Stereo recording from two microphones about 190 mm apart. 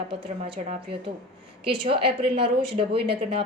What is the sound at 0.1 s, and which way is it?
A woman's voice, 30° right (ahead or behind).